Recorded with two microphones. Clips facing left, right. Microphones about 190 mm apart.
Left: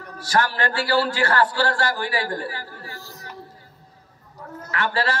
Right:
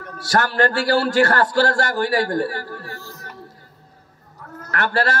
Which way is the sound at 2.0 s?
45° right (ahead or behind).